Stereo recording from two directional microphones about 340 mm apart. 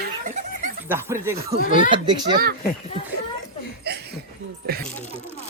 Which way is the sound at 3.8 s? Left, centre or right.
Right.